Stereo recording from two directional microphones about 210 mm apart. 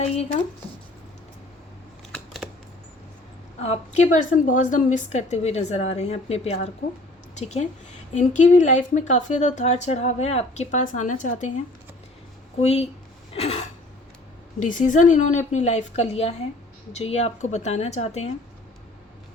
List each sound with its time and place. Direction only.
2.1 s computer keyboard: centre (ahead or behind)
3.6 s a woman's voice: 30° left (ahead or behind)
12.5 s speech: 30° left (ahead or behind)
13.3 s a sound: 30° left (ahead or behind)
14.6 s a woman's voice: 35° left (ahead or behind)